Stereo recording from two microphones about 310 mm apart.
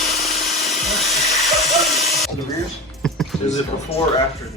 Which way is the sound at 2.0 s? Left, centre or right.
Left.